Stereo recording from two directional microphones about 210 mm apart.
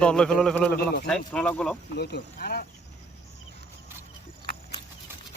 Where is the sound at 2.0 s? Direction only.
50° left (ahead or behind).